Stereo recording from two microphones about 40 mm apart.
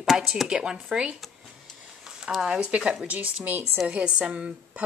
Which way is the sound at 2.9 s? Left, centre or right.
Right.